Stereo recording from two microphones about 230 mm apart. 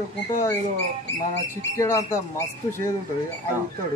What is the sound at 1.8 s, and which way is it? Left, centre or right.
Speech, centre.